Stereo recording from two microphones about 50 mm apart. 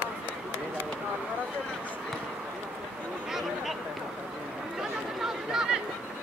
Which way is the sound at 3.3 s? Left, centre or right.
Centre.